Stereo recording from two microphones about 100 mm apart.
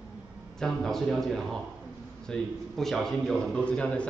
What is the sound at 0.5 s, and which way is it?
A man's voice, 5° left (ahead or behind).